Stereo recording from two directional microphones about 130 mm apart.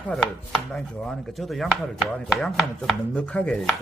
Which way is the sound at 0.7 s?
5° left (ahead or behind).